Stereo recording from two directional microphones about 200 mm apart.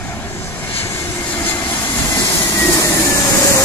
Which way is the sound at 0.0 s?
10° left (ahead or behind).